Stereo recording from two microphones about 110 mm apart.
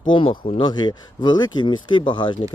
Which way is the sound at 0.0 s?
50° left (ahead or behind).